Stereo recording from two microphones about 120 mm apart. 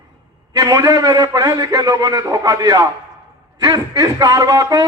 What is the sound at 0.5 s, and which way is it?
A man's voice, 30° right (ahead or behind).